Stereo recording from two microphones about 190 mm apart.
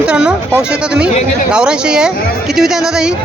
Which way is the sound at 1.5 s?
5° right (ahead or behind).